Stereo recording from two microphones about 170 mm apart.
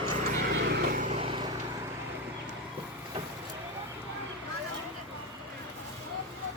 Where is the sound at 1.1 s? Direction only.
35° right (ahead or behind).